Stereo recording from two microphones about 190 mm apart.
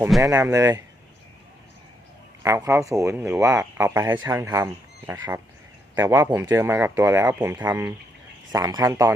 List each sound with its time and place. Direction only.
0.2 s speech: 15° right (ahead or behind)
2.4 s speech: 15° right (ahead or behind)